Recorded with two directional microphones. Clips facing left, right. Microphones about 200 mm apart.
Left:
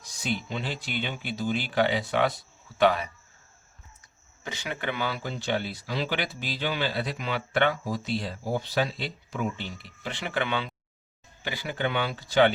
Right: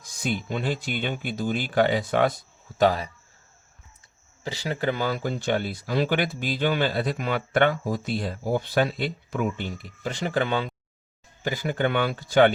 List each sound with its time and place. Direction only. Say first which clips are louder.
0.0 s speech: right 2 dB; 50° right (ahead or behind)
4.4 s speech: right 6 dB; 35° right (ahead or behind); by 12.5 s 50° right (ahead or behind)